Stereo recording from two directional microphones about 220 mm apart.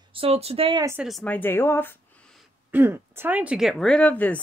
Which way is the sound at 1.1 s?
5° left (ahead or behind).